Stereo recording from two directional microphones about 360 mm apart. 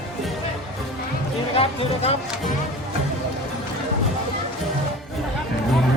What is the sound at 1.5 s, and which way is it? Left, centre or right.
Speech, centre.